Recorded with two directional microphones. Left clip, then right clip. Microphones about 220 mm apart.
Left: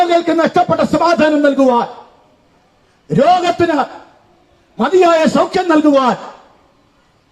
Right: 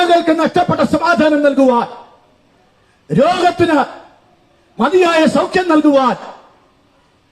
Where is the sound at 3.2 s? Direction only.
25° left (ahead or behind).